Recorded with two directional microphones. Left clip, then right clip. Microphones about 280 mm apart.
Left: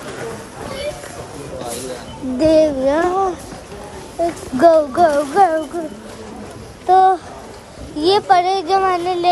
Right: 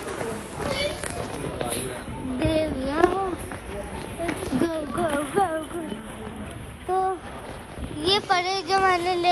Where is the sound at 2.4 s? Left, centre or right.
Left.